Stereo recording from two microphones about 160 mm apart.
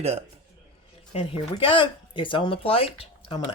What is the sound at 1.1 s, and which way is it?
Speech, 35° left (ahead or behind).